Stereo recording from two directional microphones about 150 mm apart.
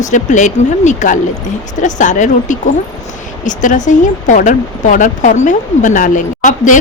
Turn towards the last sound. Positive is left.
turn(degrees=55)  # may be behind; listen again after turning